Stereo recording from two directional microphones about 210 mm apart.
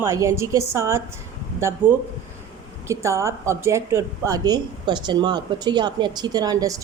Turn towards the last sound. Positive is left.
turn(degrees=-15)  # may be behind; listen again after turning